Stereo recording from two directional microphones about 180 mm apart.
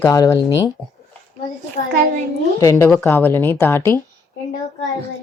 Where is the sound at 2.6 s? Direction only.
15° left (ahead or behind).